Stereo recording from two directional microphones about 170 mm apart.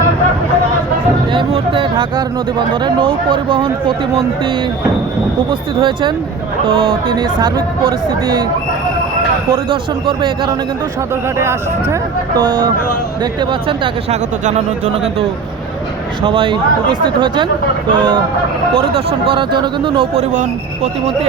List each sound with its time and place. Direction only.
1.3 s speech: 30° right (ahead or behind)
5.5 s speech: 30° right (ahead or behind)
9.5 s a man's voice: 30° right (ahead or behind)
11.3 s a man's voice: 15° right (ahead or behind); by 14.2 s 30° right (ahead or behind)
16.2 s speech: 30° right (ahead or behind)
19.3 s speech: 30° right (ahead or behind)